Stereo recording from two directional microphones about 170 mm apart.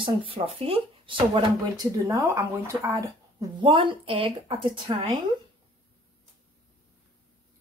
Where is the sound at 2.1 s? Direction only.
20° right (ahead or behind).